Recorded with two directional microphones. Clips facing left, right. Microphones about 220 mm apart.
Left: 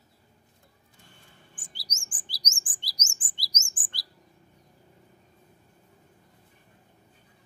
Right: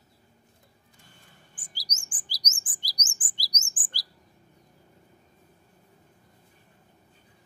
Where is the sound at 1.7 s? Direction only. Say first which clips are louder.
Right 4 dB; 25° left (ahead or behind).